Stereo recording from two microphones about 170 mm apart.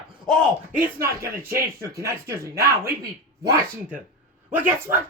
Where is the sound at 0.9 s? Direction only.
65° right (ahead or behind).